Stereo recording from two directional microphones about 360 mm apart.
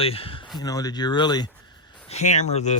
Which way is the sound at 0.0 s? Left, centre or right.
Centre.